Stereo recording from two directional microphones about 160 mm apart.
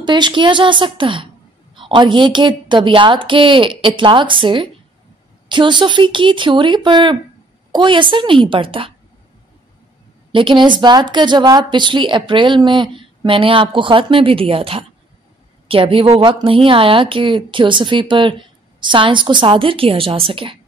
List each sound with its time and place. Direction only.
0.0 s a woman's voice: 30° right (ahead or behind)
10.3 s a woman's voice: 30° right (ahead or behind)